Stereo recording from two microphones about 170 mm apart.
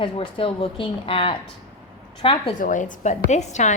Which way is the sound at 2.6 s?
50° left (ahead or behind).